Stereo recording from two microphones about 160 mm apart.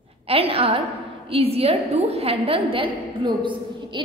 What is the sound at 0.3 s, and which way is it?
A woman's voice, 35° right (ahead or behind).